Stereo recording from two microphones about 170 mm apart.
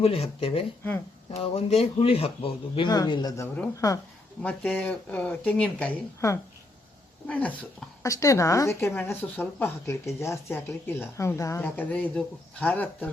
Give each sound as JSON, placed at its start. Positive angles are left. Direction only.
{"t": 0.0, "sound": "speech", "side_deg": 35}
{"t": 6.1, "sound": "speech", "side_deg": 15}